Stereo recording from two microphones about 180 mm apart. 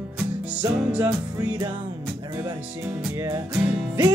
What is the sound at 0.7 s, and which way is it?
Music, 5° right (ahead or behind).